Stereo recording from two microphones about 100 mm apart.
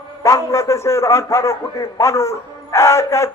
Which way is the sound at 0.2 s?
30° left (ahead or behind).